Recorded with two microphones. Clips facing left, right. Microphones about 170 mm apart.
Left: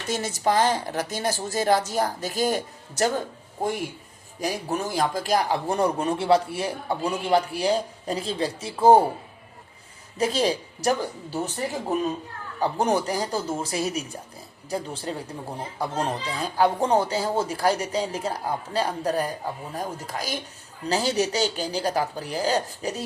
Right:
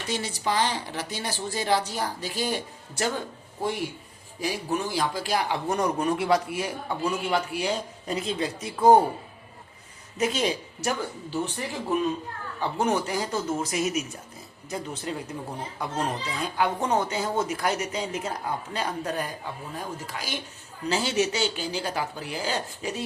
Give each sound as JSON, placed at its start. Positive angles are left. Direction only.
{"t": 0.1, "sound": "speech", "side_deg": 45}
{"t": 4.4, "sound": "speech", "side_deg": 45}
{"t": 10.2, "sound": "speech", "side_deg": 35}